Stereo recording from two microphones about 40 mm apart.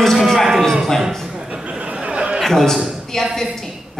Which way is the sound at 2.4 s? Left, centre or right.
Centre.